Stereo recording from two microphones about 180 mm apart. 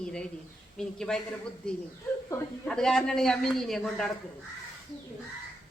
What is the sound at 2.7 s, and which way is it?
A man's voice, 5° left (ahead or behind).